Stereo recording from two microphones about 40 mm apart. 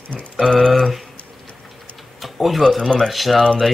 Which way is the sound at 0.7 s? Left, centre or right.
Centre.